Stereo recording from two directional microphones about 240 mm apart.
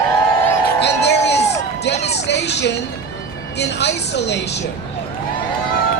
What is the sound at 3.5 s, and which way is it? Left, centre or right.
Speech, left.